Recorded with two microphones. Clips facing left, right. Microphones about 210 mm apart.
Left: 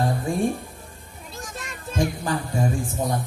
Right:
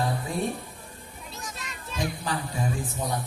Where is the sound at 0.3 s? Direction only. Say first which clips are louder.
Left 5 dB; 45° left (ahead or behind).